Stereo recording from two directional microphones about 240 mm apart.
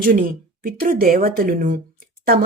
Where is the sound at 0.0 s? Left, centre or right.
Right.